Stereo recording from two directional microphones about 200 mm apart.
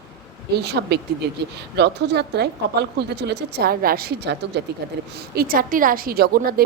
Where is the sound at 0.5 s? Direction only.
55° right (ahead or behind).